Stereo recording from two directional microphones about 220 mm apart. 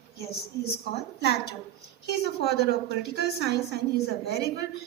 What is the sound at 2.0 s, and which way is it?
A woman's voice, 50° left (ahead or behind).